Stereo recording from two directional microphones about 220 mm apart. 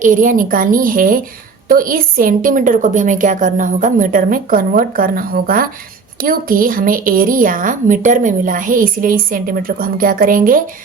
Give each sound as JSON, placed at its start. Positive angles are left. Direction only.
{"t": 0.0, "sound": "speech", "side_deg": -35}